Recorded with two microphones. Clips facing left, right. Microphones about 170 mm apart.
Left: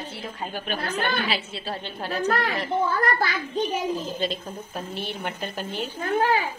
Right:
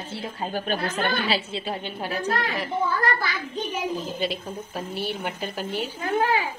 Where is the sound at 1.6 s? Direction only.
15° right (ahead or behind).